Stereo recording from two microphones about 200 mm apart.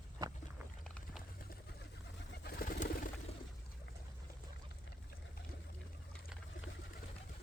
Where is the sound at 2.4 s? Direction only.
50° left (ahead or behind).